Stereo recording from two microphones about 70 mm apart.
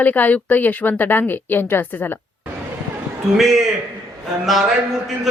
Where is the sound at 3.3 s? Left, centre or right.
Centre.